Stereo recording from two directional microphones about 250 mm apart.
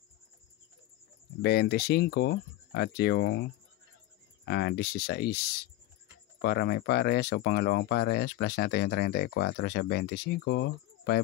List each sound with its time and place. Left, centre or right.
1.4 s speech: left
4.5 s speech: left